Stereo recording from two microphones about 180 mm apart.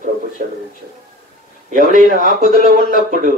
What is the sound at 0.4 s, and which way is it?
Speech, 50° right (ahead or behind).